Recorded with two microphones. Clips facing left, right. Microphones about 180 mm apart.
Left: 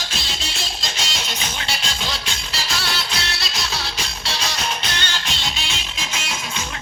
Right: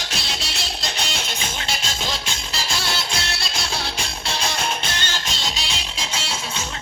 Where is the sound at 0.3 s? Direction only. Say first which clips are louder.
Even; 60° right (ahead or behind).